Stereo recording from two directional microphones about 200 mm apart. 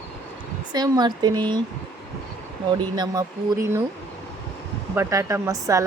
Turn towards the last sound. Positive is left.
turn(degrees=-15)  # may be behind; listen again after turning